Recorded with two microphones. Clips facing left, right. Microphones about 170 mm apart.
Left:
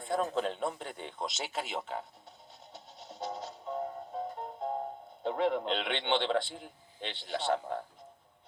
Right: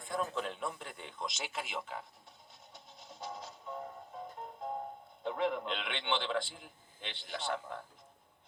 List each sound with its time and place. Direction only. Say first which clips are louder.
0.0 s a man's voice: left 5 dB; 35° left (ahead or behind)
2.7 s music: left 6 dB; 30° left (ahead or behind)
5.2 s a man's voice: left 4 dB; 35° left (ahead or behind)